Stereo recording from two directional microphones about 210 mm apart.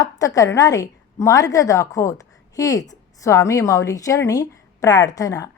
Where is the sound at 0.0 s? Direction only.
15° left (ahead or behind).